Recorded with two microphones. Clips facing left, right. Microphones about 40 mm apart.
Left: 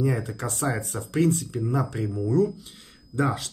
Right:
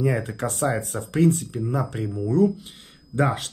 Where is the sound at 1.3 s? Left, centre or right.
Centre.